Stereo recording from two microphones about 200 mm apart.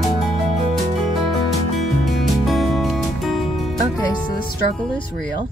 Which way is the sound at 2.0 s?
Centre (ahead or behind).